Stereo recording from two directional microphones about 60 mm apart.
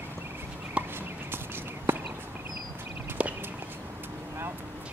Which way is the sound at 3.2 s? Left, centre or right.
Right.